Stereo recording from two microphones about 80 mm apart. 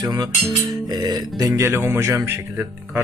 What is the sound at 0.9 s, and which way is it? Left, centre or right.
Music, right.